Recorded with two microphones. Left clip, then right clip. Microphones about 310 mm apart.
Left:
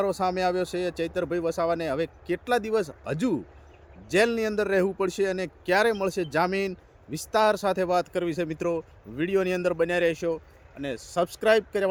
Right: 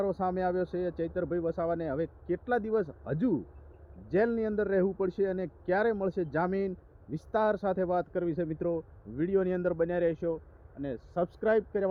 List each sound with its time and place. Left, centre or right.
0.0 s a man's voice: centre